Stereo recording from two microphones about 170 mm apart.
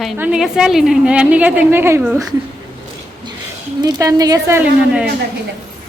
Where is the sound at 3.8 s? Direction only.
20° right (ahead or behind).